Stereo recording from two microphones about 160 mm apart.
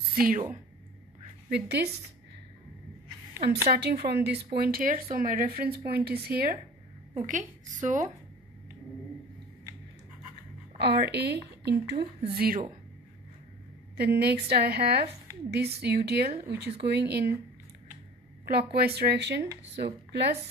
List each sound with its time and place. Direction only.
0.1 s a woman's voice: 65° right (ahead or behind)
1.5 s a woman's voice: 90° right
3.7 s speech: 75° right (ahead or behind)
4.6 s speech: 70° right (ahead or behind)
7.2 s a woman's voice: 50° right (ahead or behind)
10.8 s a woman's voice: 90° right
12.0 s speech: 35° right (ahead or behind)
12.4 s speech: 65° right (ahead or behind)
13.9 s a woman's voice: 90° right
18.4 s a woman's voice: 80° right